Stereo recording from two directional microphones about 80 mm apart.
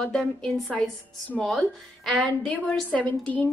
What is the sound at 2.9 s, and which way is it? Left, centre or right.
Speech, centre.